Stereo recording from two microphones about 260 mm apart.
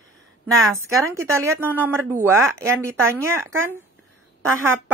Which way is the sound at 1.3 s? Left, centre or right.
Centre.